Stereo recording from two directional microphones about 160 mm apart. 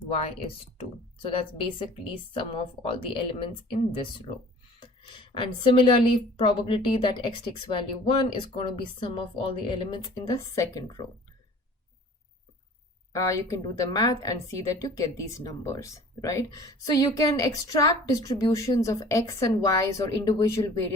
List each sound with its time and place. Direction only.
0.4 s speech: 35° left (ahead or behind)
5.4 s a woman's voice: 30° left (ahead or behind)
13.1 s a woman's voice: 20° left (ahead or behind)